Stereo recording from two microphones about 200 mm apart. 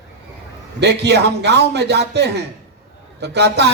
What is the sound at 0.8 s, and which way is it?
A man's voice, 55° right (ahead or behind).